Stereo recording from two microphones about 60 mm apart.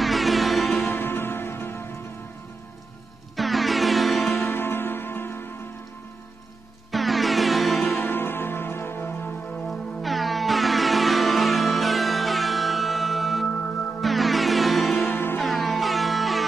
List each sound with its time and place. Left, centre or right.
0.0 s music: centre
0.7 s music: left
3.3 s music: centre
4.3 s music: left
6.9 s music: centre
7.8 s music: left
9.7 s music: centre
15.0 s music: left
15.4 s music: centre